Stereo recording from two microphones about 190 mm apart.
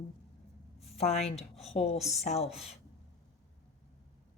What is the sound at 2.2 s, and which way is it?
Speech, 35° left (ahead or behind).